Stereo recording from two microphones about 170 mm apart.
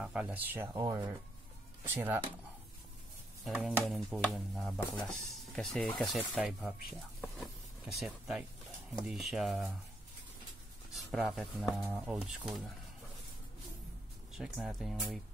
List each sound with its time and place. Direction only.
0.0 s speech: 5° right (ahead or behind)
3.4 s speech: centre (ahead or behind)
10.9 s speech: centre (ahead or behind)
14.3 s speech: centre (ahead or behind)